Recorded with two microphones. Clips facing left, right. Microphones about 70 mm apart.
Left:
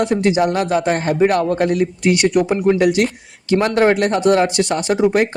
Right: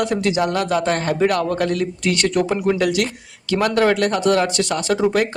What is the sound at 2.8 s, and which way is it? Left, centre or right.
A man's voice, left.